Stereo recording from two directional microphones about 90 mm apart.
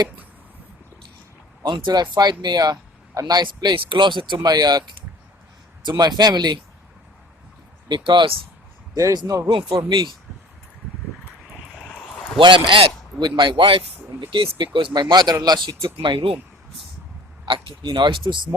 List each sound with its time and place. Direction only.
1.6 s speech: 60° right (ahead or behind)
4.4 s speech: 50° right (ahead or behind)
6.0 s speech: 50° right (ahead or behind)
7.9 s speech: 60° right (ahead or behind)
9.1 s speech: 45° right (ahead or behind)
9.5 s speech: 70° right (ahead or behind)
12.4 s a man's voice: 65° right (ahead or behind)
13.7 s speech: 70° right (ahead or behind)
15.1 s speech: 50° right (ahead or behind)
16.0 s speech: 65° right (ahead or behind)
17.4 s speech: 65° right (ahead or behind)